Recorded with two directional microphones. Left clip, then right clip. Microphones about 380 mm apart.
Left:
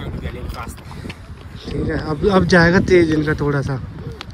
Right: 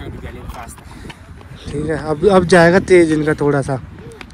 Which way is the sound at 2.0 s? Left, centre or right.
Centre.